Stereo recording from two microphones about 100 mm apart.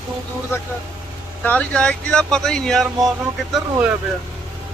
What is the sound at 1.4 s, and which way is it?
Speech, 10° left (ahead or behind).